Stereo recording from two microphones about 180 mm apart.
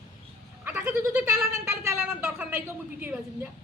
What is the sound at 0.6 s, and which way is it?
Goat, 10° right (ahead or behind).